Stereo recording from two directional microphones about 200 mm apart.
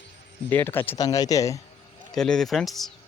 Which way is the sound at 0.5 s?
10° left (ahead or behind).